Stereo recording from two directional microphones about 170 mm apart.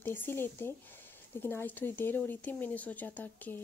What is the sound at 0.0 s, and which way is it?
Speech, 10° left (ahead or behind).